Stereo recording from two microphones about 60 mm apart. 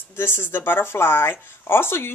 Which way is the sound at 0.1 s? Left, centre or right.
Left.